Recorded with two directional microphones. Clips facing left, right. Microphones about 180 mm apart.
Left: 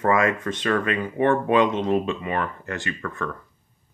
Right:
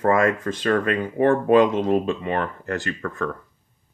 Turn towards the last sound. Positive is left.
turn(degrees=-40)  # may be behind; listen again after turning